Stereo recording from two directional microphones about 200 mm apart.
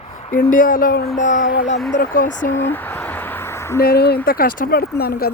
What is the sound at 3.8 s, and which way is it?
Speech, 50° left (ahead or behind).